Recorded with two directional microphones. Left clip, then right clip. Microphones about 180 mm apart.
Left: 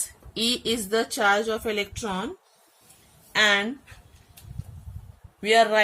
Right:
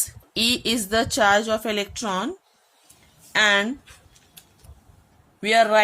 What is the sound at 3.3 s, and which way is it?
Speech, 45° right (ahead or behind).